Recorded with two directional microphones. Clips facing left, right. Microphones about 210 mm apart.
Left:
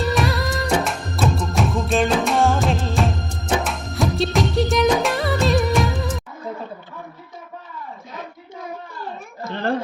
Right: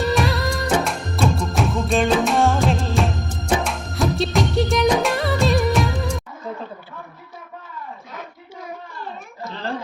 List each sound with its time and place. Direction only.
0.0 s music: centre (ahead or behind)
9.4 s a child's voice: 55° left (ahead or behind)